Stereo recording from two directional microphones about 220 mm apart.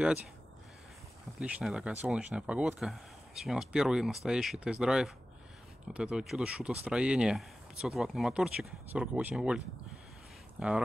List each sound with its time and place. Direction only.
1.4 s speech: 5° right (ahead or behind)
10.6 s speech: 5° right (ahead or behind)